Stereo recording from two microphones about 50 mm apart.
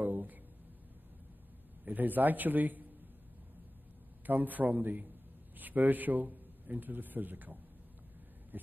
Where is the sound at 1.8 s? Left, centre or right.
Right.